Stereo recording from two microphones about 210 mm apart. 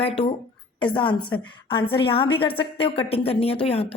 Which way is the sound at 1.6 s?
25° left (ahead or behind).